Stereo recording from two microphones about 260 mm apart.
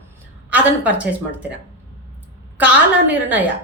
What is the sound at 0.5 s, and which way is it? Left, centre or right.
A woman's voice, centre.